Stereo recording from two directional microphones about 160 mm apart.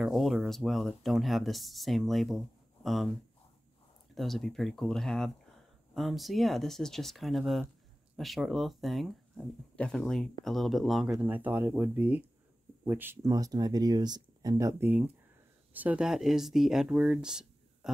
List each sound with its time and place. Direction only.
0.0 s speech: centre (ahead or behind)
4.1 s speech: centre (ahead or behind)